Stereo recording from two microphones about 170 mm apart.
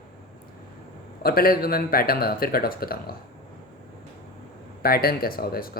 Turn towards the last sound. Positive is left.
turn(degrees=60)  # may be behind; listen again after turning